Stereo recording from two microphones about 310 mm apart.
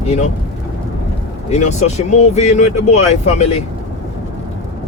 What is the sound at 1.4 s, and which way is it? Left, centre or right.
Speech, left.